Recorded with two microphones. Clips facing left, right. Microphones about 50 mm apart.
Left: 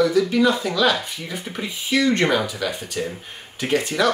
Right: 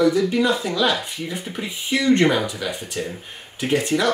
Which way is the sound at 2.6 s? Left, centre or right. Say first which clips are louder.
Left 1 dB; centre.